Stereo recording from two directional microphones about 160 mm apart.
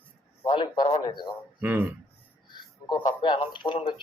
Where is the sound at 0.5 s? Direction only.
30° left (ahead or behind).